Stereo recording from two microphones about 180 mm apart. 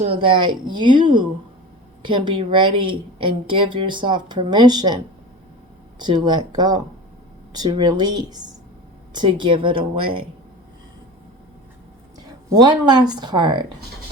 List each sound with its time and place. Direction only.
0.0 s a woman's voice: 30° right (ahead or behind)
6.0 s a woman's voice: 25° right (ahead or behind)
12.6 s a woman's voice: 25° right (ahead or behind)